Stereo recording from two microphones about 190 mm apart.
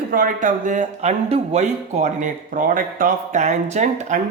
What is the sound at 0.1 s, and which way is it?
Speech, 45° right (ahead or behind).